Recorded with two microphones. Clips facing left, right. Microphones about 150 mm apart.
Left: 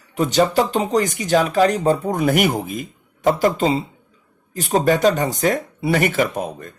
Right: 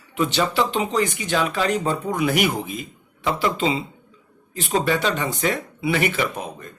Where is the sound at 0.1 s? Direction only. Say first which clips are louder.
Left 5 dB; 40° left (ahead or behind).